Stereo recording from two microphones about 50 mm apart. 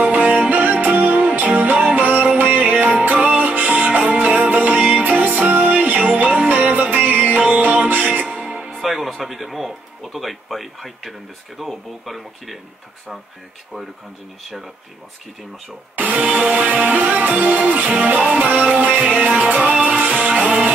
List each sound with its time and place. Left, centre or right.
0.0 s music: right
8.1 s speech: right; by 12.5 s centre
16.0 s music: right
16.3 s music: centre